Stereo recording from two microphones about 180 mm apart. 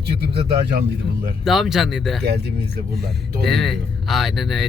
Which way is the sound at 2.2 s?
60° right (ahead or behind).